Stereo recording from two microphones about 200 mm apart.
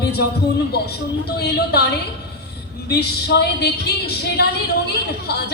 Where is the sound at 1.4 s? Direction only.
55° left (ahead or behind).